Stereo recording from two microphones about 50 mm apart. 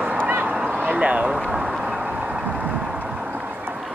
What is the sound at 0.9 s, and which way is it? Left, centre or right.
Speech, right.